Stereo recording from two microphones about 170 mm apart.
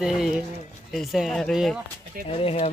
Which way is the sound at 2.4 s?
35° left (ahead or behind).